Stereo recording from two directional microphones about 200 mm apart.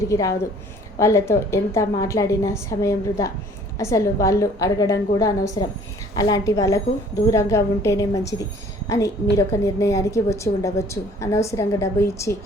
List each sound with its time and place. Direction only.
0.1 s a woman's voice: 15° left (ahead or behind)